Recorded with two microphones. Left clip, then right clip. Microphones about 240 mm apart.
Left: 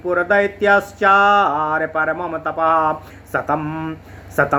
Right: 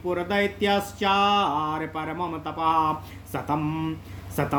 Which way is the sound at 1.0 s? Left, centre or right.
Right.